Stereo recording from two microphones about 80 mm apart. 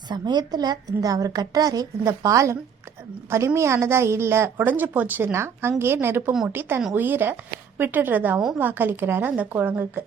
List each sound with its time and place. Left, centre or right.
0.1 s a woman's voice: right